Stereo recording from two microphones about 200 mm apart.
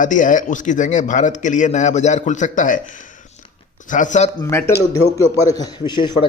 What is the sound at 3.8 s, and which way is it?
Speech, 40° left (ahead or behind).